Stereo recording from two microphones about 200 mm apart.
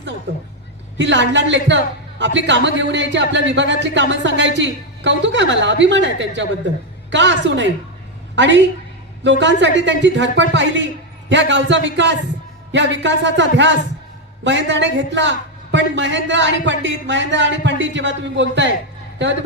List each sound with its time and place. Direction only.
0.3 s a man's voice: 65° right (ahead or behind)